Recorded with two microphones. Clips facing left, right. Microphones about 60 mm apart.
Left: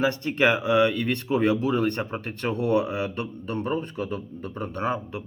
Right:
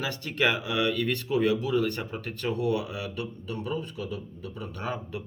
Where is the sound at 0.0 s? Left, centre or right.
Left.